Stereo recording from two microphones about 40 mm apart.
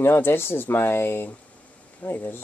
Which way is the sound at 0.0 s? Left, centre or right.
Left.